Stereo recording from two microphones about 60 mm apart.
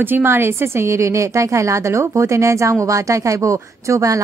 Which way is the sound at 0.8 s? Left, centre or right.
Right.